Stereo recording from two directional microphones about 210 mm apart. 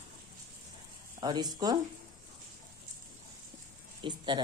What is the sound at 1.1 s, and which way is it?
Speech, 20° right (ahead or behind).